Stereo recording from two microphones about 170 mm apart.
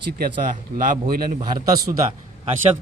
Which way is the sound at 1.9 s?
30° right (ahead or behind).